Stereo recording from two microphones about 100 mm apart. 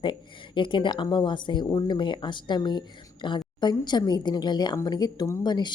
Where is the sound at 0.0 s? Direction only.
55° left (ahead or behind).